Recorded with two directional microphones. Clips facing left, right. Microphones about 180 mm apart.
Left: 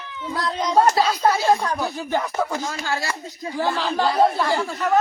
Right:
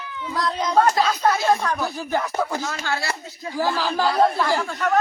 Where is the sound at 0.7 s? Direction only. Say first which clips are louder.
Left 1 dB; 15° left (ahead or behind).